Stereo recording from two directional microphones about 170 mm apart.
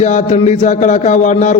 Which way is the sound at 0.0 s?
40° left (ahead or behind).